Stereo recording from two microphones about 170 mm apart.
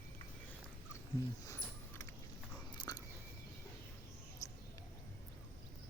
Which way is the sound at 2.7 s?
20° left (ahead or behind).